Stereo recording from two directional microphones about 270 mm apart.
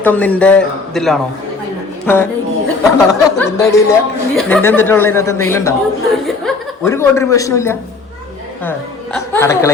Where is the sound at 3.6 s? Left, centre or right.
Centre.